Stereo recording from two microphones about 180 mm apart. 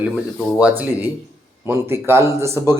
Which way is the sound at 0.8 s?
10° right (ahead or behind).